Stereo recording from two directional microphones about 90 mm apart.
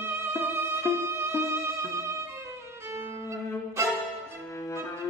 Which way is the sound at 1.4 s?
30° right (ahead or behind).